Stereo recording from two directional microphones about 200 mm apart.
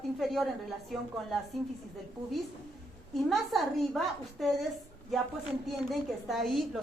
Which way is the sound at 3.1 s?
Centre (ahead or behind).